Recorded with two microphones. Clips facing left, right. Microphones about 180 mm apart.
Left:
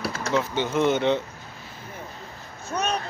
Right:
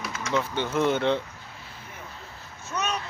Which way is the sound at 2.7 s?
35° left (ahead or behind).